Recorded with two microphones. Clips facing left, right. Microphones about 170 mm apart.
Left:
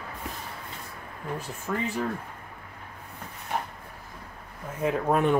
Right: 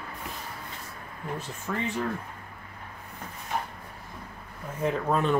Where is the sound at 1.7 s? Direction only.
5° left (ahead or behind).